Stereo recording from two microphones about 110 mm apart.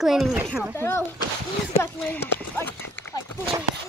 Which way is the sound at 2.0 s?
15° left (ahead or behind).